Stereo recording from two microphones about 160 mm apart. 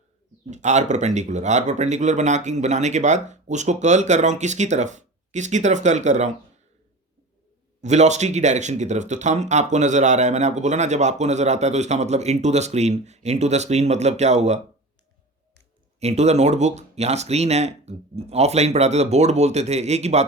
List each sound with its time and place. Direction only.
0.5 s speech: 45° right (ahead or behind)
7.8 s speech: 45° right (ahead or behind)
16.0 s speech: 45° right (ahead or behind)